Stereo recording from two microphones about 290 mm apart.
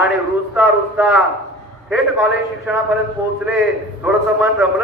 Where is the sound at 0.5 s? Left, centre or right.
Centre.